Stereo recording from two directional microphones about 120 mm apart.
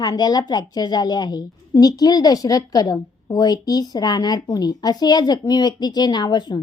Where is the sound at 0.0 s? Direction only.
35° left (ahead or behind).